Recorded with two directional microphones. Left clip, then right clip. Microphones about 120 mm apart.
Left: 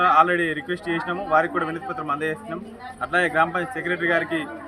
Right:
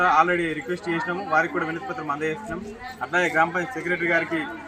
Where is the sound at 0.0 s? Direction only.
15° left (ahead or behind).